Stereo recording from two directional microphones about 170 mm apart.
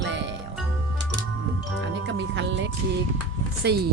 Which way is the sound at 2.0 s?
90° right.